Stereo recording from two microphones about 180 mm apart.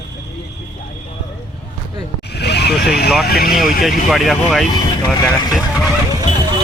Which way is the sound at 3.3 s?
60° left (ahead or behind).